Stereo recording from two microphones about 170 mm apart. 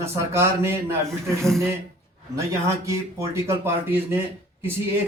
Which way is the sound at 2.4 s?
15° right (ahead or behind).